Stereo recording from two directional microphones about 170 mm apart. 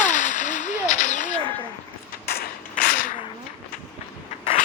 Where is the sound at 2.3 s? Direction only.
60° left (ahead or behind).